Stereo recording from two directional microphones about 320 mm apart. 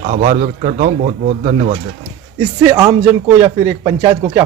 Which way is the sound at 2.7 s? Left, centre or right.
Centre.